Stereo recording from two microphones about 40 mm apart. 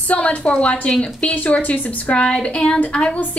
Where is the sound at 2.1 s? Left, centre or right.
Left.